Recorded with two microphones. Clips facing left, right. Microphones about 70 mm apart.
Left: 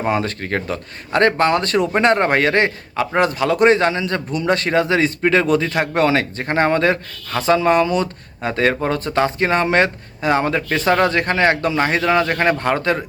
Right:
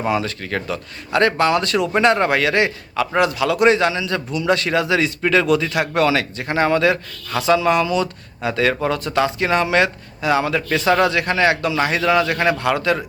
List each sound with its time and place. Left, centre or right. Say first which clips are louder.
0.1 s a man's voice: left 2 dB; left